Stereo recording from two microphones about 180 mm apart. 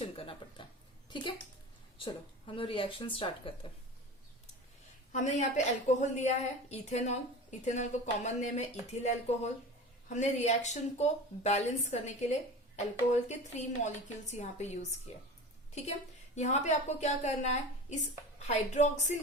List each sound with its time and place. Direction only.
0.2 s speech: 30° left (ahead or behind)
1.1 s a sound: 25° left (ahead or behind)
2.0 s speech: 30° left (ahead or behind)
5.1 s speech: 40° left (ahead or behind)